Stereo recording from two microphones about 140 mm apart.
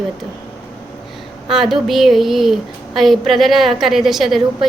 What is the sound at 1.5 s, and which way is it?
A woman's voice, centre (ahead or behind).